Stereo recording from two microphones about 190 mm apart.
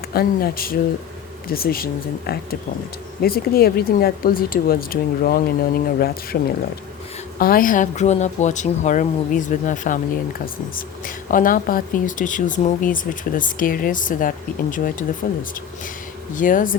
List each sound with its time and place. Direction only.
0.1 s speech: 50° left (ahead or behind)
7.3 s speech: 50° left (ahead or behind)